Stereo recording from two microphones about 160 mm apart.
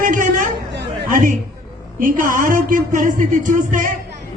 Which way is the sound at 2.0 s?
55° right (ahead or behind).